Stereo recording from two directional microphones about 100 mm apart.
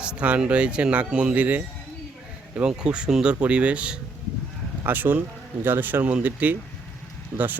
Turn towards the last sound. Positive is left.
turn(degrees=-20)  # may be behind; listen again after turning